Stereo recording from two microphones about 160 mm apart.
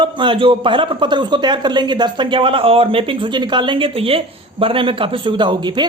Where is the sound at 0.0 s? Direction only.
30° right (ahead or behind).